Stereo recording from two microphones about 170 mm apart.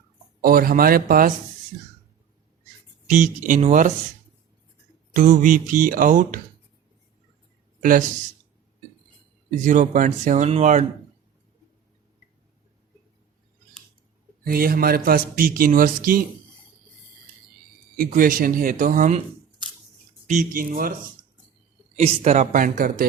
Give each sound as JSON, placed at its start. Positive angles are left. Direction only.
{"t": 0.4, "sound": "a man's voice", "side_deg": -55}
{"t": 3.1, "sound": "mantra", "side_deg": -50}
{"t": 5.1, "sound": "mantra", "side_deg": -50}
{"t": 7.8, "sound": "speech", "side_deg": -50}
{"t": 9.6, "sound": "mantra", "side_deg": -45}
{"t": 14.4, "sound": "a man's voice", "side_deg": -60}
{"t": 18.1, "sound": "a man's voice", "side_deg": -55}
{"t": 20.2, "sound": "a man's voice", "side_deg": -50}
{"t": 21.9, "sound": "mantra", "side_deg": -40}